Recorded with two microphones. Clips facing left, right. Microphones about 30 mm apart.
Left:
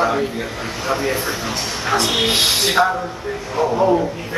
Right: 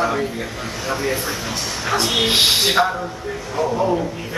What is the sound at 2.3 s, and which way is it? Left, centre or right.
Speech, centre.